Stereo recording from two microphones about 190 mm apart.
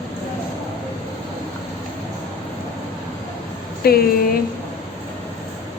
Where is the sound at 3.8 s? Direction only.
55° left (ahead or behind).